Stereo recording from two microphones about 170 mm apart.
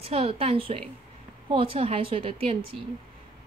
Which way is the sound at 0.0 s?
35° right (ahead or behind).